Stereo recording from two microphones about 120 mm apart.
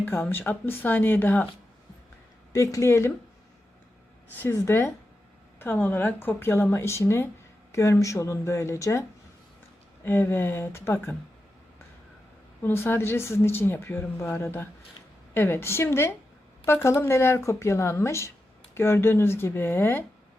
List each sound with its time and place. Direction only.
0.0 s speech: 15° left (ahead or behind)
2.7 s speech: 25° left (ahead or behind)
4.4 s speech: 20° left (ahead or behind)
12.6 s speech: 15° left (ahead or behind)